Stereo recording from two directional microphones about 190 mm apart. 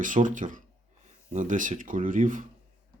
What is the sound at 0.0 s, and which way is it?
Speech, 45° right (ahead or behind).